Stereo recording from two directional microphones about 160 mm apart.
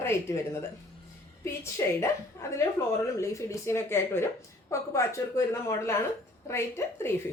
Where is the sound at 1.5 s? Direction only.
15° left (ahead or behind).